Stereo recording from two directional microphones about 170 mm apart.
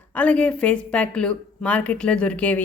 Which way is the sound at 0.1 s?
5° left (ahead or behind).